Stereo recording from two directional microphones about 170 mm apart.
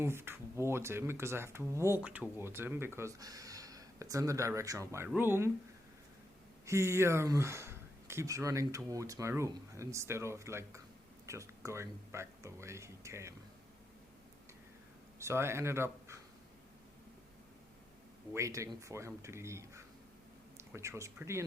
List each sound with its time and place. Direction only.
0.0 s speech: 15° right (ahead or behind)
6.7 s speech: 15° right (ahead or behind)
15.2 s speech: 15° right (ahead or behind)
18.3 s speech: 20° right (ahead or behind)